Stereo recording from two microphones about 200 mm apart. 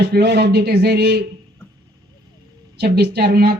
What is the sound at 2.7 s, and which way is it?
Speech, 55° right (ahead or behind).